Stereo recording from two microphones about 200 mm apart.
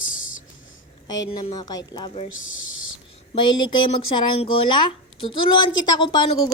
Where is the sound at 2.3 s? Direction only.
75° left (ahead or behind).